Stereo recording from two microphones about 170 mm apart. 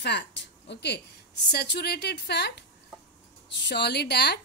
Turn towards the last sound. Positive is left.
turn(degrees=70)  # may be behind; listen again after turning